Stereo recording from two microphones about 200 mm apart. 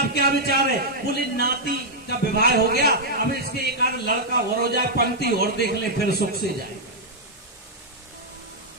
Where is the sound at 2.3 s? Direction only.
50° right (ahead or behind).